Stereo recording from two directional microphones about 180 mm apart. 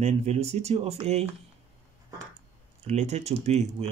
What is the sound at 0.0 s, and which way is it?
Speech, 40° right (ahead or behind).